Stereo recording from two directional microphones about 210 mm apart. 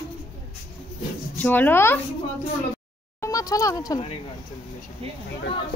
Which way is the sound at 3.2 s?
15° left (ahead or behind).